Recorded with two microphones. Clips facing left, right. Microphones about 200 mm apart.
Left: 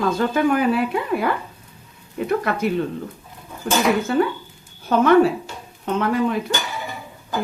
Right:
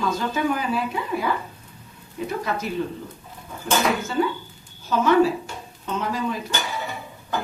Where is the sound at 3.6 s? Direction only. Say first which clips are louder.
Left 4 dB; 65° left (ahead or behind).